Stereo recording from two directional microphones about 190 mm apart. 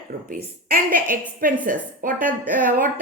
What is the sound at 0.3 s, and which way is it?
A woman's voice, 45° right (ahead or behind).